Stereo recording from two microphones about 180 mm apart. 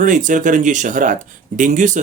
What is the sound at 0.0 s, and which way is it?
Speech, 45° right (ahead or behind).